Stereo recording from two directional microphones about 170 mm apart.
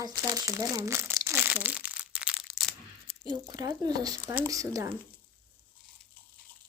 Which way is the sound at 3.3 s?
20° right (ahead or behind).